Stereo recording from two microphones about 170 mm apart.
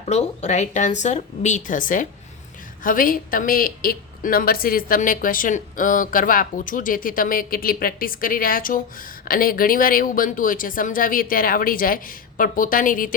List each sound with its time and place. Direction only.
0.0 s a woman's voice: 40° left (ahead or behind)